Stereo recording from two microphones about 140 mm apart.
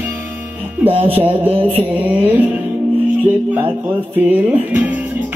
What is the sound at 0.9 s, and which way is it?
Mantra, 40° right (ahead or behind).